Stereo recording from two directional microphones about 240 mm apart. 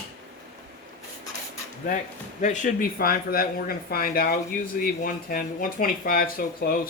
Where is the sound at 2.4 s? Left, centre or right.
Left.